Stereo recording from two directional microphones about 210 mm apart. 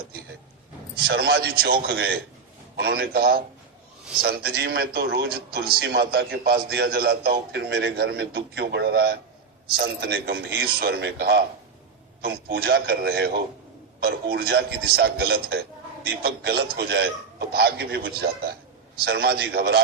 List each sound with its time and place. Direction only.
1.0 s a man's voice: 50° right (ahead or behind)